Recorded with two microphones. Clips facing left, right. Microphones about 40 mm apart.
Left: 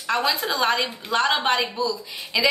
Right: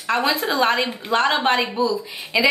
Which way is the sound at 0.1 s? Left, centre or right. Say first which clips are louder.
Right 3 dB; right.